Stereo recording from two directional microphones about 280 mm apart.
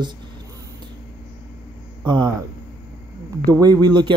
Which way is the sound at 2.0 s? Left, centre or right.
Centre.